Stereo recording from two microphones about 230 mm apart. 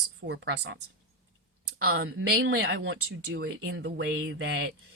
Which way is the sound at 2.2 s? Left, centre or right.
Right.